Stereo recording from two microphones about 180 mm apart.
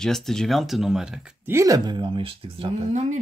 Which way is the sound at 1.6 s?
20° right (ahead or behind).